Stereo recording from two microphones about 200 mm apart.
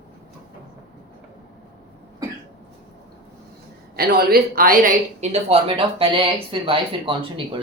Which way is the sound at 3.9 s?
50° right (ahead or behind).